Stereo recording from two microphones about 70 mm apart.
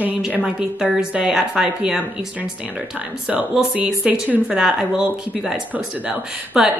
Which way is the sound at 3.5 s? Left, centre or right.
Centre.